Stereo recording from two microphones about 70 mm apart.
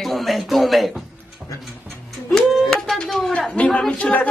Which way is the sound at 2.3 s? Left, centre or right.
Centre.